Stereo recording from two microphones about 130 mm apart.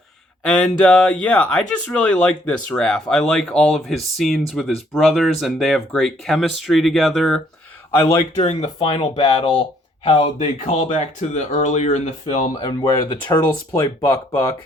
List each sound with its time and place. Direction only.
0.6 s speech: 5° left (ahead or behind)
8.4 s speech: 50° left (ahead or behind)
10.2 s speech: 55° left (ahead or behind)
12.5 s speech: 30° left (ahead or behind)